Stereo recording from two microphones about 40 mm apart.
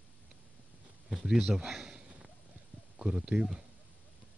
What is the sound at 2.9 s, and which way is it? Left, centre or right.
Speech, centre.